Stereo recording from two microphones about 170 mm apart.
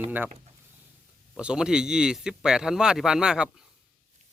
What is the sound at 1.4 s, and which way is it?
Speech, 5° right (ahead or behind).